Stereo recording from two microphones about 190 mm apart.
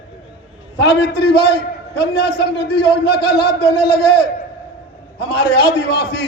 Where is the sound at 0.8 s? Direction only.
60° left (ahead or behind).